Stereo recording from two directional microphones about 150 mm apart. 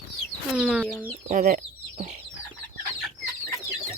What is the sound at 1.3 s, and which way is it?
Speech, 70° right (ahead or behind).